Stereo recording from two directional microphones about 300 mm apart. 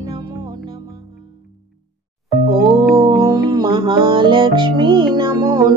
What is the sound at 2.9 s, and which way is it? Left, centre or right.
Music, centre.